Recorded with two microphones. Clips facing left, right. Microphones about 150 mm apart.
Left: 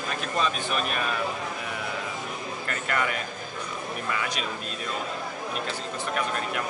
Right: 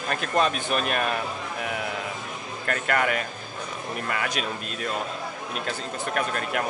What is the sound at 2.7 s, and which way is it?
A man's voice, 60° right (ahead or behind).